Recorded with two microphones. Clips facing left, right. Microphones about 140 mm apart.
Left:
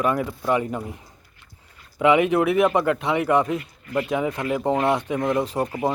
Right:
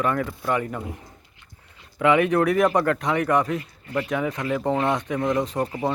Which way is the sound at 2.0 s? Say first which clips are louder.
Left 1 dB; 15° left (ahead or behind).